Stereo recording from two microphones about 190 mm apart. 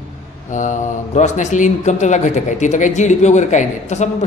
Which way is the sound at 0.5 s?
40° left (ahead or behind).